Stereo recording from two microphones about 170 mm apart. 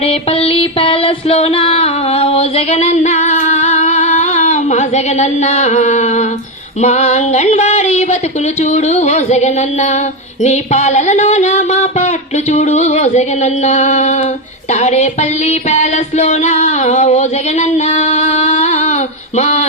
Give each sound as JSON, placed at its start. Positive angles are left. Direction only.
{"t": 0.0, "sound": "music", "side_deg": 35}
{"t": 6.8, "sound": "speech", "side_deg": 40}
{"t": 8.6, "sound": "music", "side_deg": 45}
{"t": 10.4, "sound": "speech", "side_deg": 40}
{"t": 14.7, "sound": "a sound", "side_deg": 40}